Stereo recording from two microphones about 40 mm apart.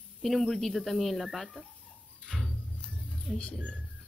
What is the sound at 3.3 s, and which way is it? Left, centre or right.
Speech, centre.